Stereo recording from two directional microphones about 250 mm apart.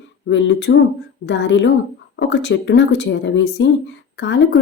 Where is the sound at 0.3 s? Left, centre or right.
Left.